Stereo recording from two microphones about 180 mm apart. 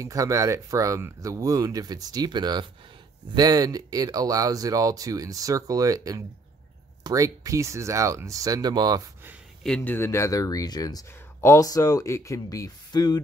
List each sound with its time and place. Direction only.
0.0 s speech: 15° right (ahead or behind)
9.8 s speech: 10° left (ahead or behind)